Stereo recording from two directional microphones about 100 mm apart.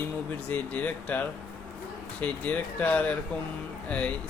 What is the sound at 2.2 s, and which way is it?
A man's voice, 15° left (ahead or behind).